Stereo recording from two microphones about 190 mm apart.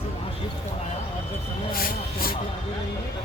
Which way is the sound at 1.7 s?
50° left (ahead or behind).